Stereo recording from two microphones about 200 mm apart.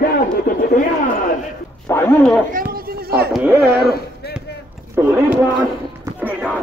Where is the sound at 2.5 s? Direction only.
45° right (ahead or behind).